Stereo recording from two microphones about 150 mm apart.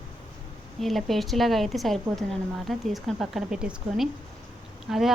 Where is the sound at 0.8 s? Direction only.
Centre (ahead or behind).